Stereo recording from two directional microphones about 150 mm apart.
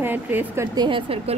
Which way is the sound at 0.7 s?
35° right (ahead or behind).